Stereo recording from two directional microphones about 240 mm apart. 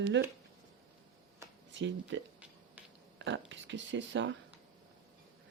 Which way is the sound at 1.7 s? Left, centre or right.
Right.